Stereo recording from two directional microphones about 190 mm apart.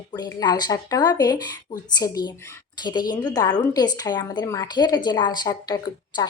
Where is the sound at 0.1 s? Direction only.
20° left (ahead or behind).